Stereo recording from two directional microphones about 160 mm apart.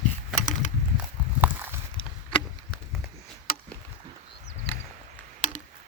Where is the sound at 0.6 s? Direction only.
50° left (ahead or behind).